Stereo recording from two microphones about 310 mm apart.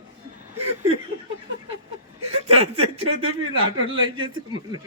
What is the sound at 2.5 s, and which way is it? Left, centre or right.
Speech, right.